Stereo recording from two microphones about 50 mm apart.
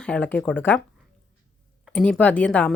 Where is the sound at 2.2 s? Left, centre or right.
Left.